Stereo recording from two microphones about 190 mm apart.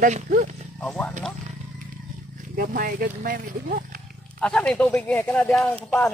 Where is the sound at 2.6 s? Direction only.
50° right (ahead or behind).